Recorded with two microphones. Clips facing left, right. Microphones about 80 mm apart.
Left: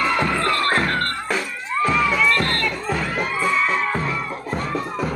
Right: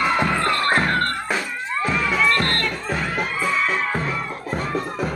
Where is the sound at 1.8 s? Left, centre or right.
Centre.